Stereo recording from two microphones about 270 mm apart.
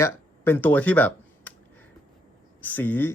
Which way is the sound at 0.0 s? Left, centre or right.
Centre.